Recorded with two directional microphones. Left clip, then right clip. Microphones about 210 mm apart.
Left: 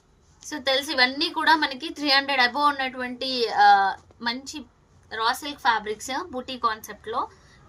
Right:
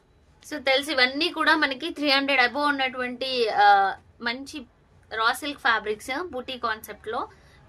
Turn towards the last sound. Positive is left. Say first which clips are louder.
# left 2 dB
turn(degrees=-50)  # may be behind; listen again after turning